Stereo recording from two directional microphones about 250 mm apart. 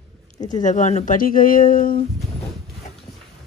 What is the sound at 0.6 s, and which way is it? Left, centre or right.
Speech, left.